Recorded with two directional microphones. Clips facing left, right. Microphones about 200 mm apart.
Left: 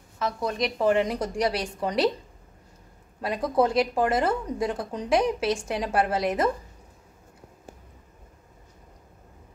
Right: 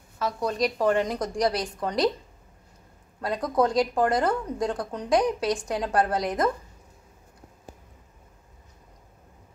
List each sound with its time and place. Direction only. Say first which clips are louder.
0.2 s a woman's voice: right 1 dB; centre (ahead or behind)
3.2 s a woman's voice: left 1 dB; 10° left (ahead or behind)